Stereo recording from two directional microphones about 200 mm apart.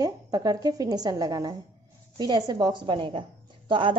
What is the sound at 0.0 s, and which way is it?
A woman's voice, 20° right (ahead or behind).